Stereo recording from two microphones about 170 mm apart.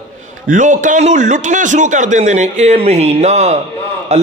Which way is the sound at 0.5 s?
50° right (ahead or behind).